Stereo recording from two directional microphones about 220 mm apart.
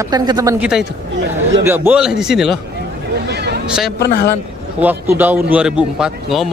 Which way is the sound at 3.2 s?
45° right (ahead or behind).